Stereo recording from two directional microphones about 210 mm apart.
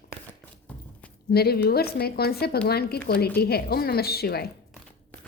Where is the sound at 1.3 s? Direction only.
50° left (ahead or behind).